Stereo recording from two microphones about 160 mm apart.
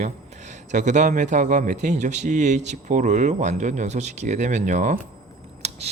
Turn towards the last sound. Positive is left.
turn(degrees=-40)  # may be behind; listen again after turning